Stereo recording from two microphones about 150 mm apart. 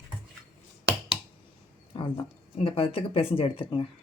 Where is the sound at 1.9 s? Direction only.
35° left (ahead or behind).